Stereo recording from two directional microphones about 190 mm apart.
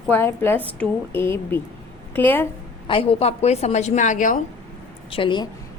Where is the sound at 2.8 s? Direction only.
30° left (ahead or behind).